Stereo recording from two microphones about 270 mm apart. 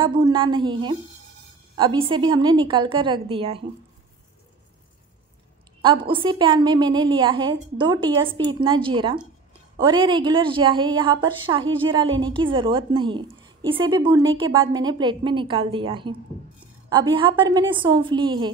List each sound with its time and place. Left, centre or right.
0.0 s a woman's voice: centre
5.8 s a woman's voice: centre